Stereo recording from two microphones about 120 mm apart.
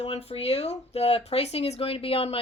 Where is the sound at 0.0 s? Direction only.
60° left (ahead or behind).